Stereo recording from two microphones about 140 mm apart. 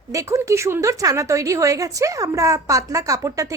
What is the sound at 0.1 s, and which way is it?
A woman's voice, 20° right (ahead or behind).